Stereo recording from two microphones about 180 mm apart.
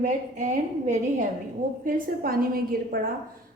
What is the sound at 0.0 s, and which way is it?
A woman's voice, 45° right (ahead or behind).